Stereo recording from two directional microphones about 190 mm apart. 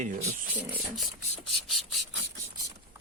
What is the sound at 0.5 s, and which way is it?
Speech, 10° right (ahead or behind).